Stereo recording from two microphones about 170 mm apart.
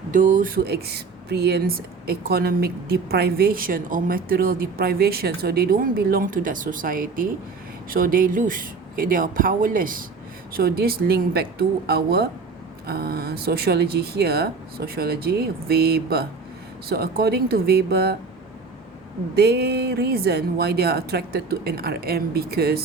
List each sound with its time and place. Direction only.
0.1 s speech: 50° right (ahead or behind); by 18.2 s 70° right (ahead or behind)
19.4 s speech: 75° right (ahead or behind)